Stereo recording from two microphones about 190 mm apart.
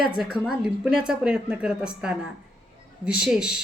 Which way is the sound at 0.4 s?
Centre (ahead or behind).